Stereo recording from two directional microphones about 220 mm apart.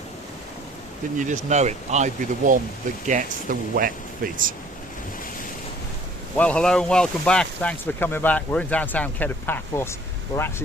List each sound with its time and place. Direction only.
1.2 s speech: 35° right (ahead or behind)
6.3 s speech: 5° left (ahead or behind)